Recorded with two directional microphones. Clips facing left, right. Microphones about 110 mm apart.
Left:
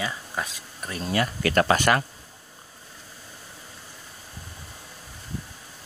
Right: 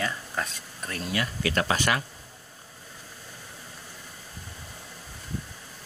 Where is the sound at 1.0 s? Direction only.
35° left (ahead or behind).